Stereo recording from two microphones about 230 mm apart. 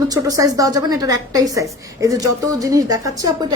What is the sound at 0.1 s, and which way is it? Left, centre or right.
Speech, centre.